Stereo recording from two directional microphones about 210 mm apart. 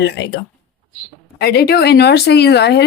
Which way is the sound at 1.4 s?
50° left (ahead or behind).